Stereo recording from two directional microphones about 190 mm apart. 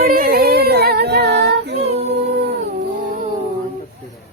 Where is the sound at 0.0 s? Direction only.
50° right (ahead or behind).